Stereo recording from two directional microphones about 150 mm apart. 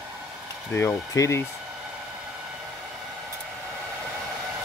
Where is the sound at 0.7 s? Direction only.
20° left (ahead or behind).